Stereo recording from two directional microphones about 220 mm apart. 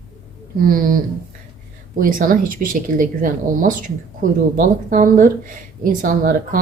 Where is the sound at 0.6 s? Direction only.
40° right (ahead or behind).